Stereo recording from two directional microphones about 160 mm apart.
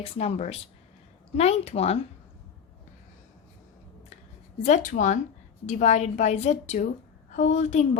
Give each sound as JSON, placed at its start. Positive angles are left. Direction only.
{"t": 0.0, "sound": "speech", "side_deg": 40}
{"t": 4.6, "sound": "a woman's voice", "side_deg": 50}